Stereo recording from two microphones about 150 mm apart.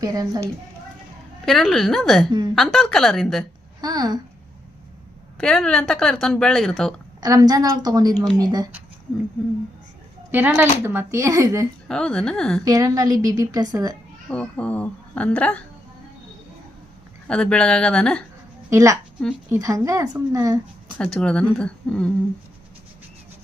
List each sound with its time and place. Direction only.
0.0 s a woman's voice: 25° right (ahead or behind)
1.5 s speech: centre (ahead or behind)
3.8 s a woman's voice: 25° right (ahead or behind)
5.4 s speech: 5° left (ahead or behind)
7.2 s a woman's voice: 25° right (ahead or behind)
10.3 s speech: 15° right (ahead or behind)
11.9 s speech: 5° left (ahead or behind)
12.6 s a woman's voice: 25° right (ahead or behind)
14.3 s speech: 10° left (ahead or behind)
17.2 s speech: 5° left (ahead or behind)
18.7 s a woman's voice: 20° right (ahead or behind)
21.0 s speech: 5° left (ahead or behind)